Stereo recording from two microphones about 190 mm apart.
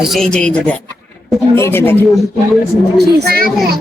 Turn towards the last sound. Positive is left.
turn(degrees=-55)  # may be behind; listen again after turning